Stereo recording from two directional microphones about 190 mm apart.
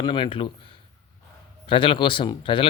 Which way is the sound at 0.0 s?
25° left (ahead or behind).